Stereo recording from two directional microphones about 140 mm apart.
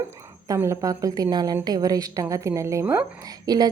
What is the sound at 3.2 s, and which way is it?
Speech, 25° right (ahead or behind).